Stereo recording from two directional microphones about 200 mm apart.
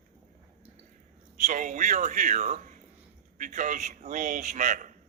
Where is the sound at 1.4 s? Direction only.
40° right (ahead or behind).